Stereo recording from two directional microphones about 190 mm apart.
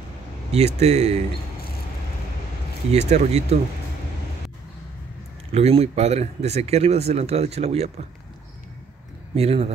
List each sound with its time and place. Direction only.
0.5 s speech: 35° right (ahead or behind)
2.9 s speech: 35° right (ahead or behind)
5.5 s speech: 35° right (ahead or behind)
9.3 s speech: 30° right (ahead or behind)